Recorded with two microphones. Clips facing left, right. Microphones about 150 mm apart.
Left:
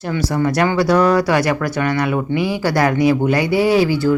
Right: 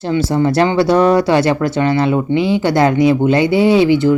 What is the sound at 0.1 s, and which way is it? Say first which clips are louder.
Speech: right 4 dB; 25° right (ahead or behind).